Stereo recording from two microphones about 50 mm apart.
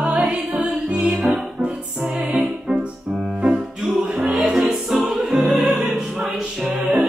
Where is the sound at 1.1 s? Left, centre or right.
Centre.